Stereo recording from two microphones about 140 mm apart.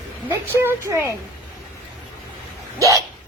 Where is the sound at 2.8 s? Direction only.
25° right (ahead or behind).